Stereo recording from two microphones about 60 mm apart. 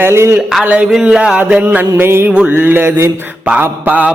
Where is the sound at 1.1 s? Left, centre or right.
Centre.